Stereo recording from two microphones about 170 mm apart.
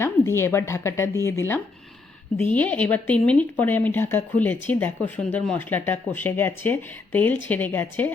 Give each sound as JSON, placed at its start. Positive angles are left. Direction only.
{"t": 0.0, "sound": "speech", "side_deg": 15}